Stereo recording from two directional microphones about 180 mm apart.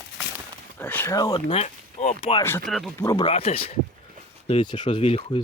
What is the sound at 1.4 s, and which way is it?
Speech, 40° left (ahead or behind).